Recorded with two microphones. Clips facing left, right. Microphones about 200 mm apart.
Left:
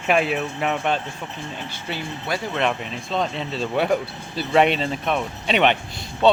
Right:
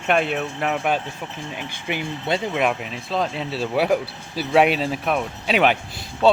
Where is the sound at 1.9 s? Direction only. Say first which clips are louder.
Right 4 dB; 20° right (ahead or behind).